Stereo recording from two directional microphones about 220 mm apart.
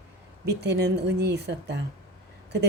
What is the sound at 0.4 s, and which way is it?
A woman's voice, 50° right (ahead or behind).